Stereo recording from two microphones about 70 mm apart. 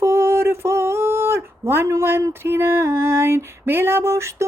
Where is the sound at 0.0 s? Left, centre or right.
Right.